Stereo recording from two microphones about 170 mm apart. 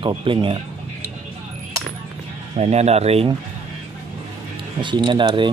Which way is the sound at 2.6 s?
40° right (ahead or behind).